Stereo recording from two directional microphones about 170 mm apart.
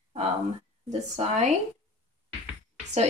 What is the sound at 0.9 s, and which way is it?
Speech, 40° right (ahead or behind).